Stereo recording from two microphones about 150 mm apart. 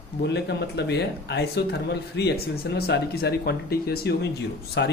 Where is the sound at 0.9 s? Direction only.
90° left.